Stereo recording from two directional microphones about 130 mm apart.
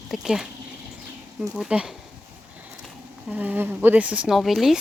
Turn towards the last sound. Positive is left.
turn(degrees=0)  # may be behind; listen again after turning